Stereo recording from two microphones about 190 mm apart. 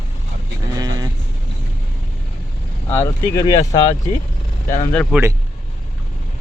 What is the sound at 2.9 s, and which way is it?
Speech, 15° left (ahead or behind).